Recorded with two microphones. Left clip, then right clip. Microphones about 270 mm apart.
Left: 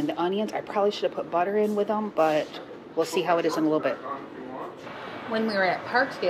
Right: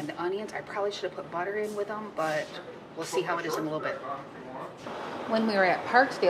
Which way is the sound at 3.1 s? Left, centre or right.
Left.